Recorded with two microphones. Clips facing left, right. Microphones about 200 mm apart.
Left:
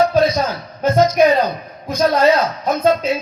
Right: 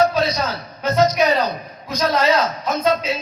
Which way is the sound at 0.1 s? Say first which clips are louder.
Left 5 dB; 50° left (ahead or behind).